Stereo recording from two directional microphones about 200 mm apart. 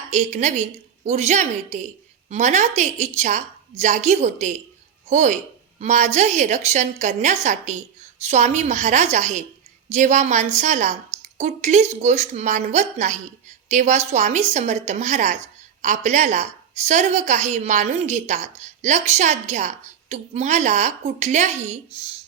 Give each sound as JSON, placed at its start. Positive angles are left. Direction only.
{"t": 0.1, "sound": "a woman's voice", "side_deg": -35}